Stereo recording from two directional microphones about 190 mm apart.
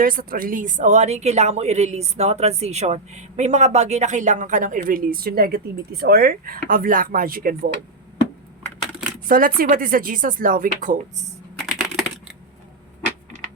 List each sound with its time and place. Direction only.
0.0 s speech: 50° right (ahead or behind)
9.3 s speech: 50° right (ahead or behind)